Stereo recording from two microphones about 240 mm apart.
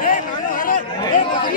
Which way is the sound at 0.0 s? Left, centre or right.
Left.